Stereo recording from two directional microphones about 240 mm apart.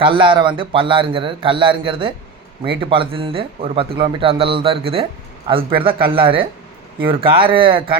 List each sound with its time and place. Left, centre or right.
0.0 s speech: right